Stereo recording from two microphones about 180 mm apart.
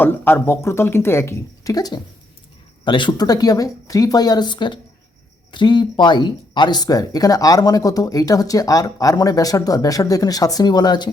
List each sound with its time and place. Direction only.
0.0 s speech: 10° left (ahead or behind)